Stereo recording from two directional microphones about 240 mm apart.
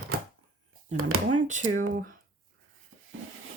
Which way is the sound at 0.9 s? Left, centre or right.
Right.